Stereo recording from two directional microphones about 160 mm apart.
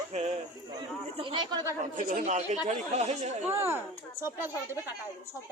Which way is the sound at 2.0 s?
50° right (ahead or behind).